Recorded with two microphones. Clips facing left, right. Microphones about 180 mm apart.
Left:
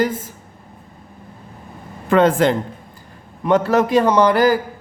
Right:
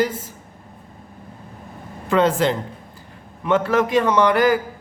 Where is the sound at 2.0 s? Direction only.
55° left (ahead or behind).